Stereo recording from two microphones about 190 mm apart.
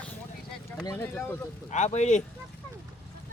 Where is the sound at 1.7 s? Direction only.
40° left (ahead or behind).